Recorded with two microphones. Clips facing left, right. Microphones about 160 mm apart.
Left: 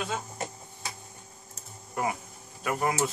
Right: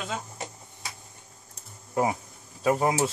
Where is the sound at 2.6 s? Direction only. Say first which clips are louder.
Right 5 dB; 30° right (ahead or behind).